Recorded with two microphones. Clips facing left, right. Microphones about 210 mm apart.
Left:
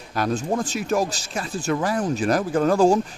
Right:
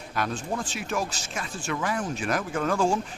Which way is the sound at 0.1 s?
40° left (ahead or behind).